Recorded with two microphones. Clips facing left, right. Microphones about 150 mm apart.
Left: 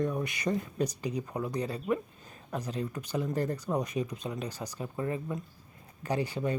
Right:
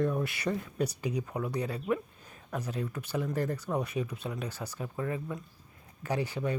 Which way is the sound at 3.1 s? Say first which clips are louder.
Left 1 dB; 15° left (ahead or behind).